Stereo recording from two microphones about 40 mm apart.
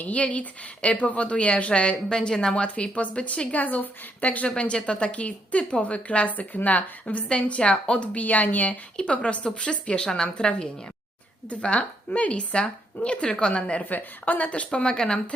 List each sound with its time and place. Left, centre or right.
0.0 s a woman's voice: left
3.5 s speech: left
4.5 s a woman's voice: left
7.3 s speech: left
9.0 s a woman's voice: left
13.2 s a woman's voice: left
13.9 s speech: left
14.7 s a woman's voice: left